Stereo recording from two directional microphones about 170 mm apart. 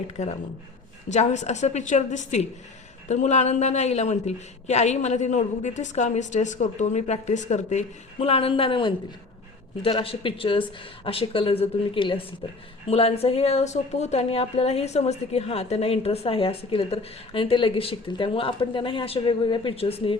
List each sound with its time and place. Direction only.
0.2 s a woman's voice: 45° left (ahead or behind)